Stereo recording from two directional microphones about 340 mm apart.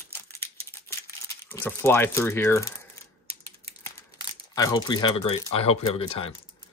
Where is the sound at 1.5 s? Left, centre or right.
Centre.